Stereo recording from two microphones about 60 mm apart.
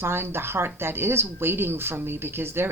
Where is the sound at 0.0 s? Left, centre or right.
Right.